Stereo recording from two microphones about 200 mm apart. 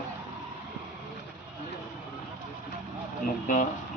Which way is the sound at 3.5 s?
40° left (ahead or behind).